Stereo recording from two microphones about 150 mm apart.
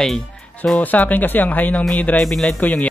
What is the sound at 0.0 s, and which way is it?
Speech, centre (ahead or behind).